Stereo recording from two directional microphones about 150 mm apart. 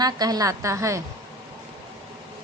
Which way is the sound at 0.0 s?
25° right (ahead or behind).